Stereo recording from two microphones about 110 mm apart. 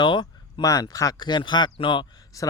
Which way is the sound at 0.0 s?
45° left (ahead or behind).